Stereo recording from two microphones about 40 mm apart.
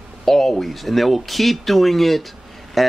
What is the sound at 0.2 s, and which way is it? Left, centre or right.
Speech, centre.